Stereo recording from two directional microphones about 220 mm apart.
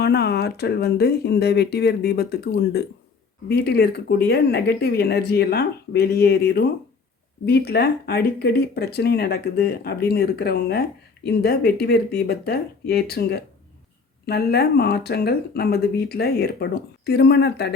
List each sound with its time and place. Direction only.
0.0 s speech: 45° left (ahead or behind)